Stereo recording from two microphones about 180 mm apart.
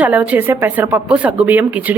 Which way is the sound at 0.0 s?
10° right (ahead or behind).